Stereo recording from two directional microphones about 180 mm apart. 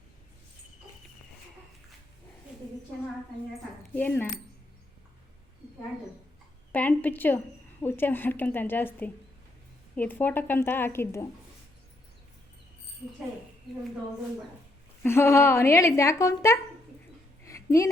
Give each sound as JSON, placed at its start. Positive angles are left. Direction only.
{"t": 3.9, "sound": "a woman's voice", "side_deg": 10}
{"t": 6.7, "sound": "a woman's voice", "side_deg": 10}
{"t": 15.0, "sound": "a woman's voice", "side_deg": 15}
{"t": 17.4, "sound": "a sound", "side_deg": 15}